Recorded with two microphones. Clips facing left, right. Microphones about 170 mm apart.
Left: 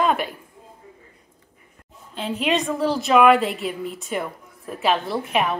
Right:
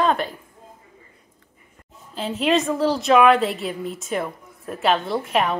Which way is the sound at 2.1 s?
Centre (ahead or behind).